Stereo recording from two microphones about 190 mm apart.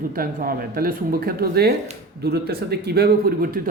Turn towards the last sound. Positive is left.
turn(degrees=-50)  # may be behind; listen again after turning